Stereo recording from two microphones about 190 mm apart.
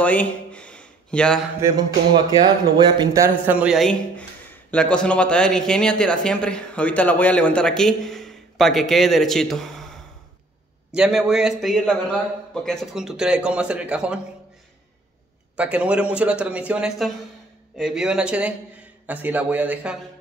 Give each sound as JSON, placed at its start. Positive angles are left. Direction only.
{"t": 0.0, "sound": "a sound", "side_deg": 5}
{"t": 1.6, "sound": "music", "side_deg": -20}
{"t": 2.8, "sound": "a man's voice", "side_deg": -20}
{"t": 11.0, "sound": "a man's voice", "side_deg": -5}
{"t": 15.5, "sound": "a man's voice", "side_deg": -5}